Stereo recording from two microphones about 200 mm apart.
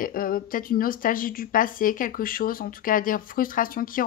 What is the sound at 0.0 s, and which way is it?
Speech, 45° left (ahead or behind).